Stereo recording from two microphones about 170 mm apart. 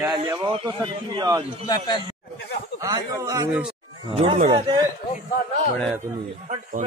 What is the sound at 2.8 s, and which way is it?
Speech, 20° right (ahead or behind).